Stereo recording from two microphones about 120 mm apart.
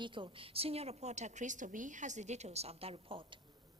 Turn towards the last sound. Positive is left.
turn(degrees=-50)  # may be behind; listen again after turning